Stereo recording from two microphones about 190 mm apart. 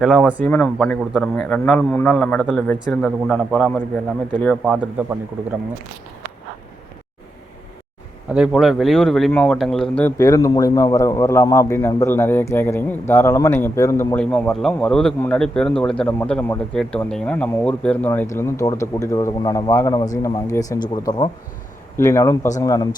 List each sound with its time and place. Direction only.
0.0 s a man's voice: centre (ahead or behind)
8.3 s speech: centre (ahead or behind); by 22.9 s 20° left (ahead or behind)